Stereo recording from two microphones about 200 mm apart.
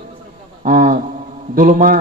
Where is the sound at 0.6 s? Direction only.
40° right (ahead or behind).